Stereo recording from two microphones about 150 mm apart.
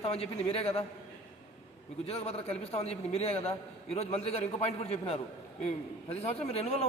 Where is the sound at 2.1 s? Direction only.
45° left (ahead or behind).